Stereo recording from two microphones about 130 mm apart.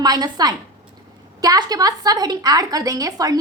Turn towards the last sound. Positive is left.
turn(degrees=-30)  # may be behind; listen again after turning